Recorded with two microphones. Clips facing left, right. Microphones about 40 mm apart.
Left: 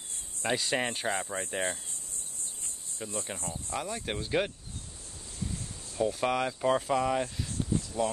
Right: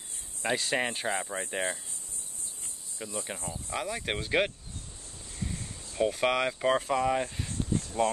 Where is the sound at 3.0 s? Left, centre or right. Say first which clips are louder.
Even; centre.